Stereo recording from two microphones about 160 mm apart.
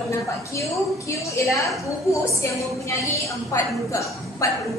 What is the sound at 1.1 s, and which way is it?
A woman's voice, 20° left (ahead or behind).